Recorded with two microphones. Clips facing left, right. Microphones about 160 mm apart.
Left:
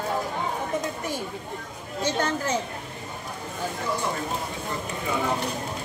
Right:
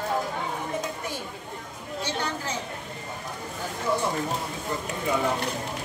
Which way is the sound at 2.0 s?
45° left (ahead or behind).